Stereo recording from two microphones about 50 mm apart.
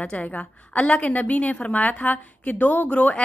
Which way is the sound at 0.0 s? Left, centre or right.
Left.